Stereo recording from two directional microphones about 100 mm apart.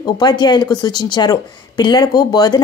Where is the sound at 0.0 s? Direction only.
45° left (ahead or behind).